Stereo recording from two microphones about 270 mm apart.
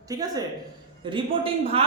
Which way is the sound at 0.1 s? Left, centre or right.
Centre.